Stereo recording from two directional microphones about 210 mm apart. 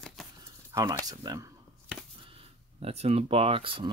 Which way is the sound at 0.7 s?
15° right (ahead or behind).